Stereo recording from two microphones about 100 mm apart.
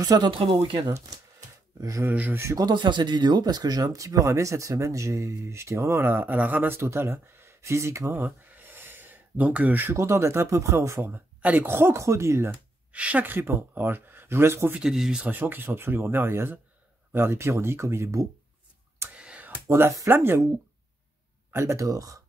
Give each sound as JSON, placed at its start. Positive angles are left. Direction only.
{"t": 0.0, "sound": "speech", "side_deg": -45}
{"t": 1.8, "sound": "speech", "side_deg": -30}
{"t": 2.0, "sound": "speech", "side_deg": -20}
{"t": 2.4, "sound": "speech", "side_deg": -35}
{"t": 2.7, "sound": "speech", "side_deg": -50}
{"t": 11.1, "sound": "speech", "side_deg": -15}
{"t": 12.9, "sound": "speech", "side_deg": -15}
{"t": 14.8, "sound": "speech", "side_deg": -5}
{"t": 15.3, "sound": "speech", "side_deg": -20}
{"t": 19.1, "sound": "computer keyboard", "side_deg": -10}
{"t": 20.1, "sound": "speech", "side_deg": -25}
{"t": 21.5, "sound": "speech", "side_deg": -25}